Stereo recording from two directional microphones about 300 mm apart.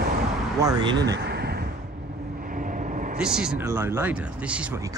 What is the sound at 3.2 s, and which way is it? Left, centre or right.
Speech, centre.